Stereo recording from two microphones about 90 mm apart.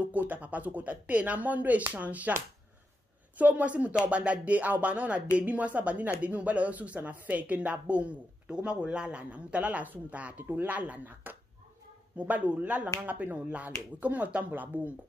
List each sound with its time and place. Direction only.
0.0 s speech: 20° right (ahead or behind)
3.3 s speech: 15° right (ahead or behind)